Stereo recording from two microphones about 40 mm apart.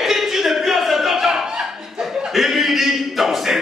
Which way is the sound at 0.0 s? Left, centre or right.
Centre.